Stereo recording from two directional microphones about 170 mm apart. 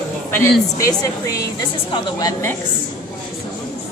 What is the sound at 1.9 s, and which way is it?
Speech, 25° left (ahead or behind).